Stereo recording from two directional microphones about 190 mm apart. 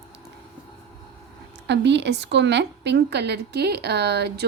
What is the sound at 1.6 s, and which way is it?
A woman's voice, 65° right (ahead or behind).